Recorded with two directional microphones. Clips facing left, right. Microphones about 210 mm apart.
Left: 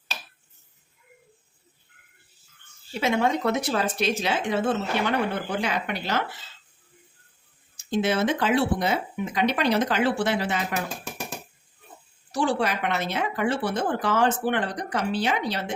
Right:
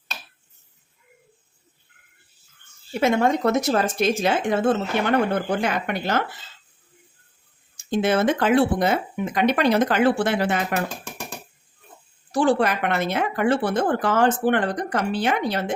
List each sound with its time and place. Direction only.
2.9 s speech: 50° right (ahead or behind)
7.8 s speech: 55° right (ahead or behind)
12.3 s speech: 55° right (ahead or behind)